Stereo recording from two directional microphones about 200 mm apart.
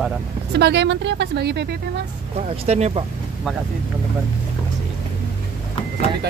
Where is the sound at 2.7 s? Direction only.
30° right (ahead or behind).